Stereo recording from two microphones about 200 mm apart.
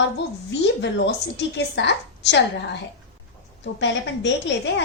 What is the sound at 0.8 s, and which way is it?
A woman's voice, 60° left (ahead or behind).